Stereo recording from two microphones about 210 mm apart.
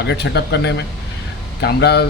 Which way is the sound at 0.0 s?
55° left (ahead or behind).